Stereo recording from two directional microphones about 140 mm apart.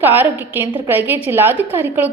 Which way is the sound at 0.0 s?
15° right (ahead or behind).